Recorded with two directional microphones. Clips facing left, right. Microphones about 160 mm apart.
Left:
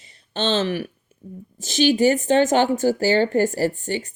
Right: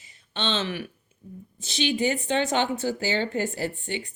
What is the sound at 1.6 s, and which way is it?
A woman's voice, 45° left (ahead or behind).